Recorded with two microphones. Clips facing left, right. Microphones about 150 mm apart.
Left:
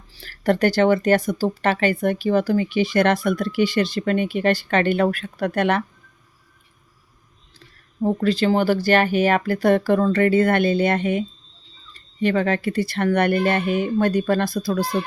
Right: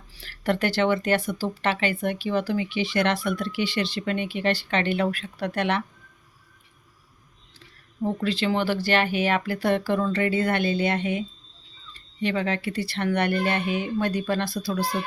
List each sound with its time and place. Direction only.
0.1 s speech: 40° left (ahead or behind)
8.0 s speech: 40° left (ahead or behind)
12.2 s speech: 50° left (ahead or behind)